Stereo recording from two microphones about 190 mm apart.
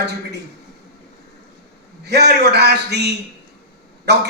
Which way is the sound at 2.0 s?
60° right (ahead or behind).